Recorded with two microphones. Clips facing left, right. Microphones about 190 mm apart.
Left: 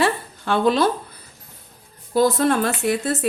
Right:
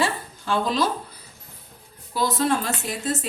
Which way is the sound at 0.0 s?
60° left (ahead or behind).